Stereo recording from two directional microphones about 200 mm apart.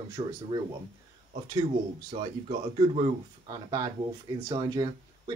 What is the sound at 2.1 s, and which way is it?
Speech, 30° right (ahead or behind).